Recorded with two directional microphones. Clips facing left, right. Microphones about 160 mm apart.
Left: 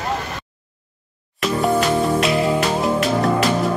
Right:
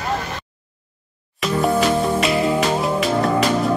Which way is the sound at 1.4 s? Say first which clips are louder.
Even; centre (ahead or behind).